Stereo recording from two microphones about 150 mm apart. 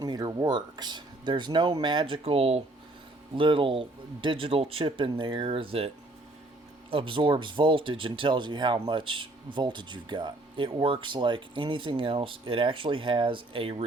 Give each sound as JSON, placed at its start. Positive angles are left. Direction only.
{"t": 0.0, "sound": "speech", "side_deg": -25}
{"t": 6.9, "sound": "speech", "side_deg": -35}